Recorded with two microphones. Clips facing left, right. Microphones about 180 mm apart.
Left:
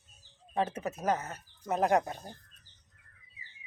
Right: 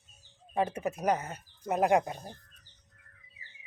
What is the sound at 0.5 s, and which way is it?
Speech, 10° right (ahead or behind).